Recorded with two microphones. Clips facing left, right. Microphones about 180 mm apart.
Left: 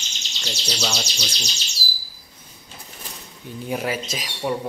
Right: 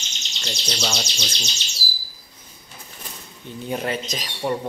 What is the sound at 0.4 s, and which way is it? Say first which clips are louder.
Speech: even; 5° left (ahead or behind).